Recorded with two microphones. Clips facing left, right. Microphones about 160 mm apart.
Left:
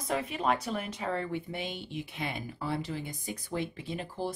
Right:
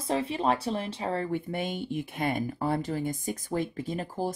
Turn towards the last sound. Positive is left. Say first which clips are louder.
# right 4 dB
turn(degrees=-45)  # may be behind; listen again after turning